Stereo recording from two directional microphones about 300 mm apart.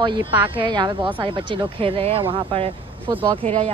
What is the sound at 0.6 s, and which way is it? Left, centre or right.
Speech, centre.